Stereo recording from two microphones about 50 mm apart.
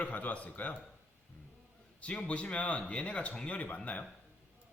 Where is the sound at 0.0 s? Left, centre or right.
Left.